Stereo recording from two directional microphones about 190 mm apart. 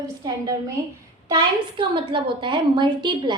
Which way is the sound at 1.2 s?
25° right (ahead or behind).